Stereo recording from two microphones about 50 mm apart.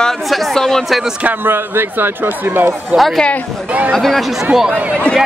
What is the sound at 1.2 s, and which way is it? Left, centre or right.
Speech, right.